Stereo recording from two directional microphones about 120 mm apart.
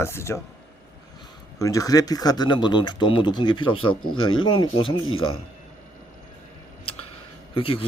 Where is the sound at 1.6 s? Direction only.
30° left (ahead or behind); by 5.3 s 45° left (ahead or behind).